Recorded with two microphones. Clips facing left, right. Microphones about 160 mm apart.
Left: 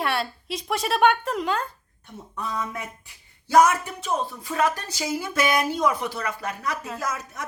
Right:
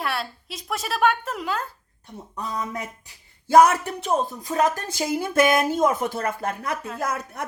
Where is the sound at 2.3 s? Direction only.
35° right (ahead or behind).